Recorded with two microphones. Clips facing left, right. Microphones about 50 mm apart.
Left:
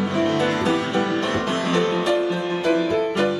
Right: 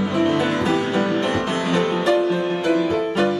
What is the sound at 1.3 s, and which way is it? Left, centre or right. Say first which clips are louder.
Music: right 1 dB; right.